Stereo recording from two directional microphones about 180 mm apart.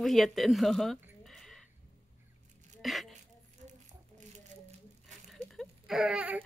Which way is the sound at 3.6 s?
45° right (ahead or behind).